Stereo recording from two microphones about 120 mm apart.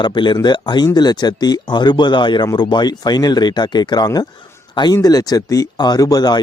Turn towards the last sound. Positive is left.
turn(degrees=35)  # may be behind; listen again after turning